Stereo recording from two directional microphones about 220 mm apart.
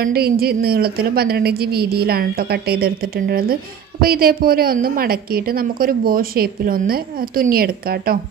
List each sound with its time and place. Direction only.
0.0 s a woman's voice: 45° right (ahead or behind)